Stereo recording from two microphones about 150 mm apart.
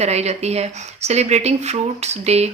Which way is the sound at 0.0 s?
45° right (ahead or behind).